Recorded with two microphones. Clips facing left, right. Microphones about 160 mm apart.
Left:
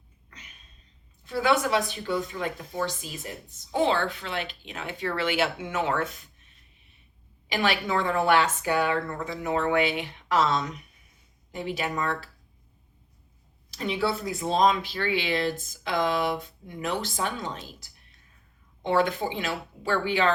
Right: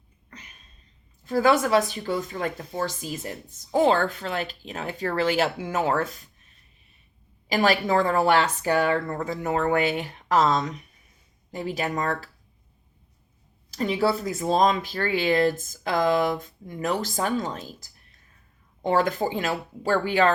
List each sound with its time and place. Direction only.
1.2 s a woman's voice: 40° right (ahead or behind)
7.4 s a woman's voice: 40° right (ahead or behind)
13.7 s speech: 45° right (ahead or behind)